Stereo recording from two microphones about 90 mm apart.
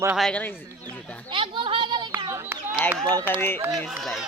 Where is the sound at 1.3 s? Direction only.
65° right (ahead or behind).